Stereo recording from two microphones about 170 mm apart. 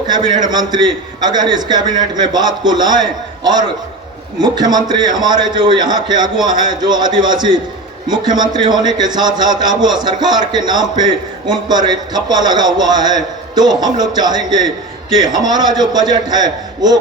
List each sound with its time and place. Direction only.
0.5 s a man's voice: 25° right (ahead or behind)